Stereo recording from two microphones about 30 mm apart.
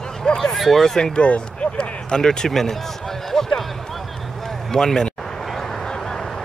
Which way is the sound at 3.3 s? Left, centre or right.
Centre.